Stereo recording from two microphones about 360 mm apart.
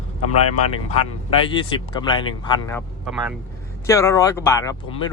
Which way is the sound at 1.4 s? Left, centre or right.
Centre.